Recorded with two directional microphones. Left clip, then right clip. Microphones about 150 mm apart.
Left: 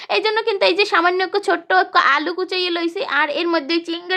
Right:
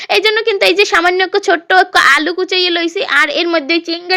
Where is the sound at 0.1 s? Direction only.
10° right (ahead or behind).